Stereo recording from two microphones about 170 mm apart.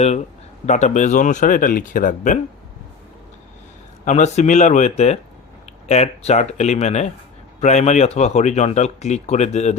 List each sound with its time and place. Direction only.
0.6 s speech: 45° left (ahead or behind)
4.0 s speech: 45° left (ahead or behind)